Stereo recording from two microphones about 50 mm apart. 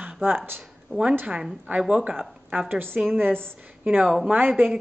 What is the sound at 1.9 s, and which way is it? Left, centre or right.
Speech, right.